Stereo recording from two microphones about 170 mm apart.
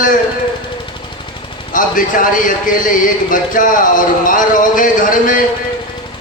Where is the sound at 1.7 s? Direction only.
50° left (ahead or behind).